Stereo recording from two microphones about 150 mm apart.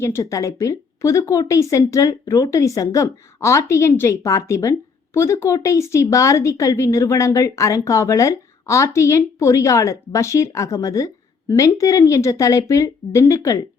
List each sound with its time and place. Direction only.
0.0 s a woman's voice: 20° left (ahead or behind)